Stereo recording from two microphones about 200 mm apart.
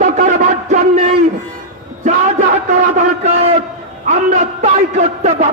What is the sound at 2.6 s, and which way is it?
A man's voice, 35° right (ahead or behind).